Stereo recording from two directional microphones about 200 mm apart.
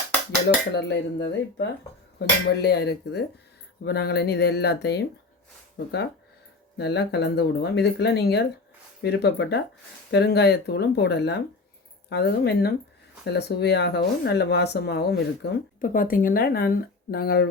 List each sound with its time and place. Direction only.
0.8 s speech: 60° left (ahead or behind)